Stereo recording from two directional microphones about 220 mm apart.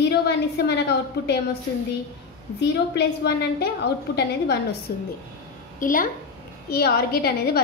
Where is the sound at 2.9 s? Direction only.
45° left (ahead or behind).